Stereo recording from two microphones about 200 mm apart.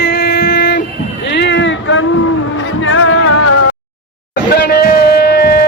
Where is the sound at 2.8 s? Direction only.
80° left.